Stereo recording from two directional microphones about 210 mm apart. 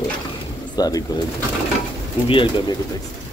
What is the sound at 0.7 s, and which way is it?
Speech, 20° left (ahead or behind).